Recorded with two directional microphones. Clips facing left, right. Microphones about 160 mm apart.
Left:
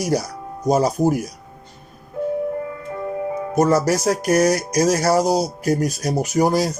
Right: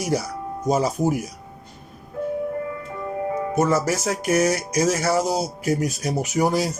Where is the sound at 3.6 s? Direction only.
40° left (ahead or behind).